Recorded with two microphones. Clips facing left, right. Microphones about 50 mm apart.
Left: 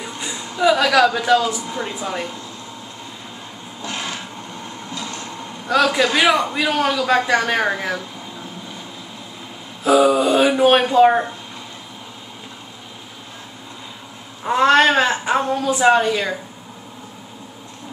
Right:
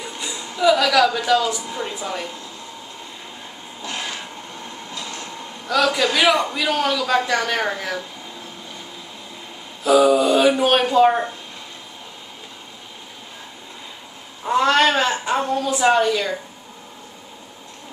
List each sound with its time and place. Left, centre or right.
0.0 s a sound: centre
0.9 s a woman's voice: centre
3.8 s a sound: centre
6.2 s a woman's voice: centre
6.6 s a woman's voice: left
9.8 s mantra: centre
10.6 s a woman's voice: left
14.4 s a woman's voice: centre